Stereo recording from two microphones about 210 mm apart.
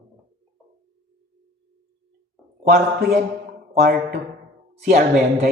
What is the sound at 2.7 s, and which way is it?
Mantra, 50° right (ahead or behind).